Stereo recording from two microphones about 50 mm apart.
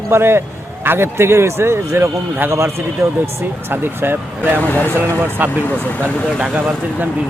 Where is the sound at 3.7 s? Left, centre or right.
Right.